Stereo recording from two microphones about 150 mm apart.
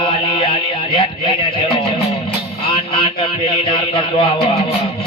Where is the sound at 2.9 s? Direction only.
35° left (ahead or behind).